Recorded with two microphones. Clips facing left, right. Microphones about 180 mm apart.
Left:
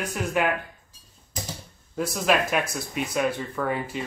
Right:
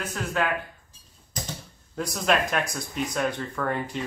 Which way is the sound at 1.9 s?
5° left (ahead or behind).